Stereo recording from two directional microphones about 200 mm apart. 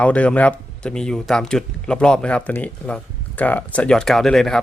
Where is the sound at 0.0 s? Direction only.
5° left (ahead or behind).